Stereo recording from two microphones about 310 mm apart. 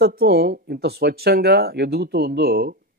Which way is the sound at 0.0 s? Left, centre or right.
Right.